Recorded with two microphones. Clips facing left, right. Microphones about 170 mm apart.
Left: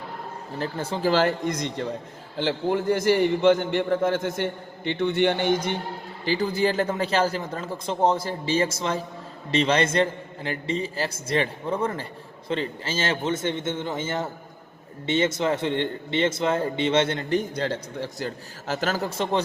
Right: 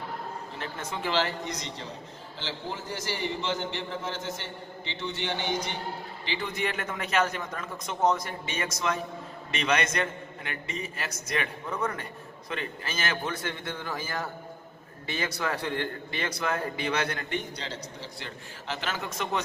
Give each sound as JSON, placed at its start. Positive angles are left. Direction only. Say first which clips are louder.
{"t": 0.6, "sound": "a man's voice", "louder": "left 9 dB", "side_deg": 30}
{"t": 1.1, "sound": "a man's voice", "louder": "left 6 dB", "side_deg": 50}
{"t": 6.2, "sound": "a man's voice", "louder": "left 9 dB", "side_deg": 35}
{"t": 17.3, "sound": "a man's voice", "louder": "left 9 dB", "side_deg": 50}